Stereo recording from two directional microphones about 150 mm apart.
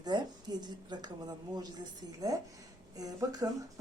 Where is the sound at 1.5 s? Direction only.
25° right (ahead or behind).